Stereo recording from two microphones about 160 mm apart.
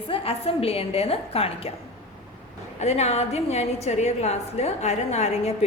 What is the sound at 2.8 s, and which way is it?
A woman's voice, 45° left (ahead or behind).